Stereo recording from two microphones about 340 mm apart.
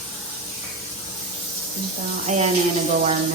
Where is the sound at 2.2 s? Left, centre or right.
Centre.